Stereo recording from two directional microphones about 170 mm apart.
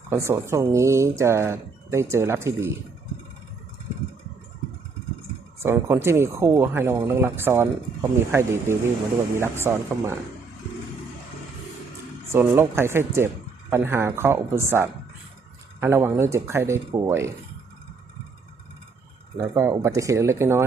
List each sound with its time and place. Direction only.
0.1 s speech: 15° right (ahead or behind)
5.6 s speech: 15° right (ahead or behind)
12.3 s speech: 15° right (ahead or behind)
19.4 s speech: 15° right (ahead or behind)